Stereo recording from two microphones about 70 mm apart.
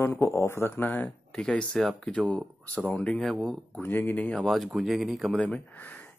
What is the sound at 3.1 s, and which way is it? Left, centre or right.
Speech, centre.